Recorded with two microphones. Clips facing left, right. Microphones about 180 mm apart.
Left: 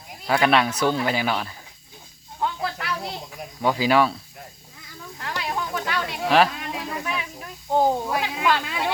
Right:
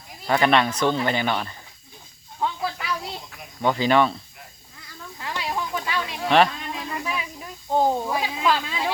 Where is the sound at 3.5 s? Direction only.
5° left (ahead or behind).